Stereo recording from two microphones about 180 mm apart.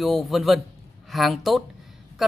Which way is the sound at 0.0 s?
Centre (ahead or behind).